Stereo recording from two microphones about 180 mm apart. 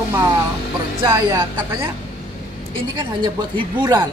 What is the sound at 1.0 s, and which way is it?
Speech, 15° right (ahead or behind).